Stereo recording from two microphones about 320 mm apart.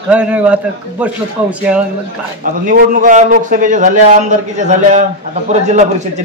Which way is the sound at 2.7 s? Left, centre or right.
Right.